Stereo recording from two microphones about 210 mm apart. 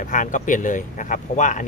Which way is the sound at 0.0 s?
35° left (ahead or behind).